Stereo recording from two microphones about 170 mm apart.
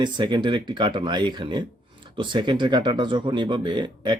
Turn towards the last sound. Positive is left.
turn(degrees=-25)  # may be behind; listen again after turning